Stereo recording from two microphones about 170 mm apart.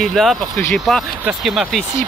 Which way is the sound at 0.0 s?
Centre (ahead or behind).